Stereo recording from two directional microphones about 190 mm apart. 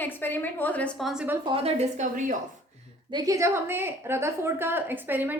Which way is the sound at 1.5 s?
35° right (ahead or behind).